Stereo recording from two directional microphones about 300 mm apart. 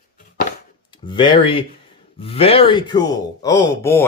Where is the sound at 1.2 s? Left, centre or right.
Centre.